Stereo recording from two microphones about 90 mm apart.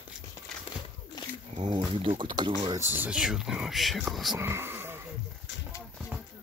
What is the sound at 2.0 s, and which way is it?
Speech, 70° right (ahead or behind).